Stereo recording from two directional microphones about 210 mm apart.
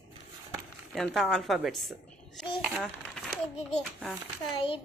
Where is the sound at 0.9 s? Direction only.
Centre (ahead or behind).